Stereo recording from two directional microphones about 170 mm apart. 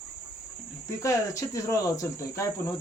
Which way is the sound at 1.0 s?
20° left (ahead or behind).